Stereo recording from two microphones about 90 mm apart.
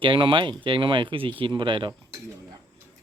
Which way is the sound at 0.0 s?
70° right (ahead or behind).